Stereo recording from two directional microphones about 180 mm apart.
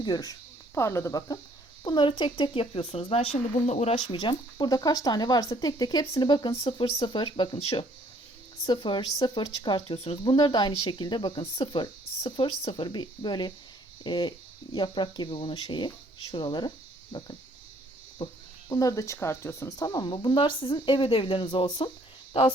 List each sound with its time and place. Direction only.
0.0 s a woman's voice: 20° left (ahead or behind)